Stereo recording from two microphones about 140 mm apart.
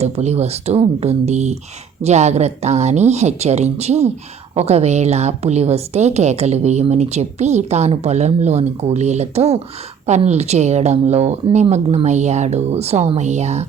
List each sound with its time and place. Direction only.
0.0 s a woman's voice: 50° right (ahead or behind)